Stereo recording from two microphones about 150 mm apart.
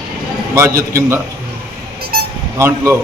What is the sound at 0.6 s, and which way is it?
Speech, 20° right (ahead or behind).